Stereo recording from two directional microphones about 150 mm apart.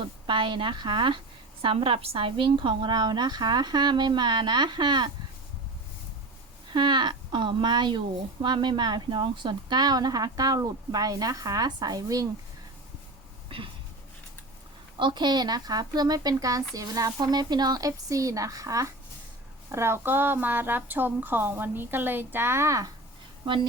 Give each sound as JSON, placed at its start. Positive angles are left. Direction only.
{"t": 0.3, "sound": "a woman's voice", "side_deg": -30}
{"t": 6.7, "sound": "a woman's voice", "side_deg": -30}
{"t": 14.9, "sound": "a woman's voice", "side_deg": -30}